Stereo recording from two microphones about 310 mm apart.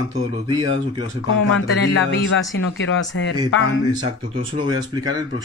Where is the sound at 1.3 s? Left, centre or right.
Left.